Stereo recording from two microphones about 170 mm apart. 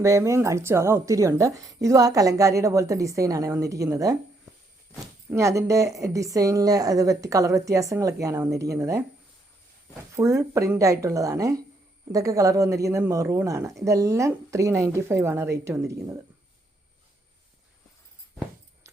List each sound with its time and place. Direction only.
0.0 s a woman's voice: 20° right (ahead or behind)
5.3 s a woman's voice: 15° right (ahead or behind)
10.2 s a woman's voice: 15° right (ahead or behind)